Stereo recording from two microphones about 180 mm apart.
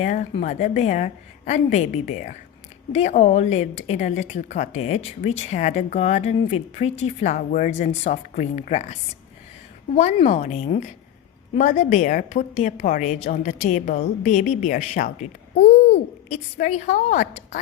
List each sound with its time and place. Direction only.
0.0 s a woman's voice: 40° left (ahead or behind)